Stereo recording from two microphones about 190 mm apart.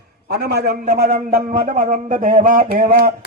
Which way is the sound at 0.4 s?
45° right (ahead or behind).